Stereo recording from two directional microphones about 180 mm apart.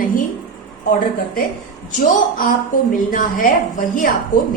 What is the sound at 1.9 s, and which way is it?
A woman's voice, 50° left (ahead or behind).